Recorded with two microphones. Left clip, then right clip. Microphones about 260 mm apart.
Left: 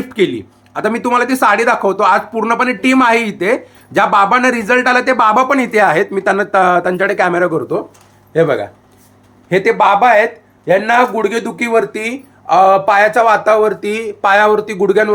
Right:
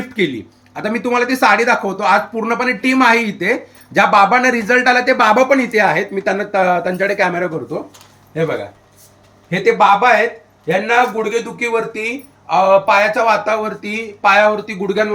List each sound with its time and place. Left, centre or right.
0.1 s speech: centre
9.5 s speech: centre